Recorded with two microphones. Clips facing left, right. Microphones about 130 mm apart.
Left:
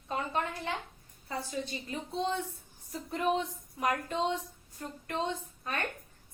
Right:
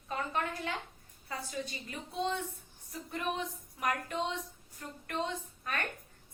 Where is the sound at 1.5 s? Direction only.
30° left (ahead or behind).